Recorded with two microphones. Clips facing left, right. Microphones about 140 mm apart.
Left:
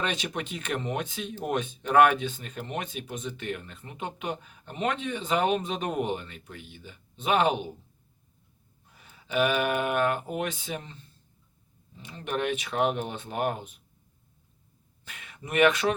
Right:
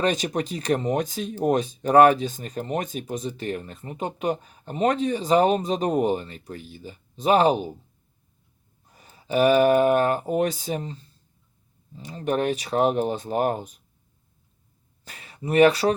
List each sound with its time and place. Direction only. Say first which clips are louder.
0.0 s speech: right 8 dB; 40° right (ahead or behind)
8.9 s speech: right 6 dB; 40° right (ahead or behind)
15.0 s speech: right 10 dB; 35° right (ahead or behind)